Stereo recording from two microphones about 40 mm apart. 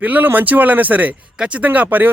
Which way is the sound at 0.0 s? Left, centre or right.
Right.